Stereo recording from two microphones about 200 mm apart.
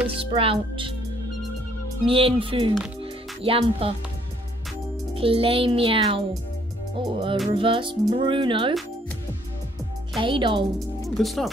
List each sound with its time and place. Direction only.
0.1 s music: 25° right (ahead or behind)
2.0 s music: 30° right (ahead or behind)
5.1 s music: 25° right (ahead or behind)
10.1 s music: 25° right (ahead or behind)
11.1 s speech: centre (ahead or behind)